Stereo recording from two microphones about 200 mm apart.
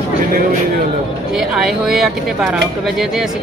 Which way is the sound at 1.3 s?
Centre (ahead or behind).